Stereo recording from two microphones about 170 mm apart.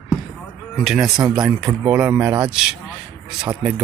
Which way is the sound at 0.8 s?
5° right (ahead or behind).